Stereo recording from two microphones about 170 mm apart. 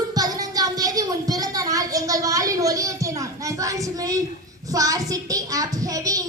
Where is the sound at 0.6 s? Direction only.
20° right (ahead or behind).